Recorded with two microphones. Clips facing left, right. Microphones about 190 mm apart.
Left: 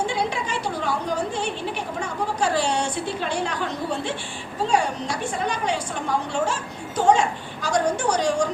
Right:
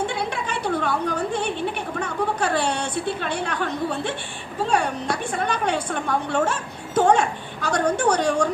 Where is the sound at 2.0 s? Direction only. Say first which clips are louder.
Right 2 dB; 60° right (ahead or behind).